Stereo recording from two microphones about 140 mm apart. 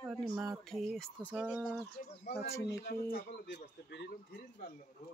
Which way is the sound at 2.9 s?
90° left.